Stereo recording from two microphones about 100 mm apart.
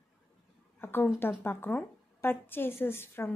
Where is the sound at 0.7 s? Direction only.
20° left (ahead or behind).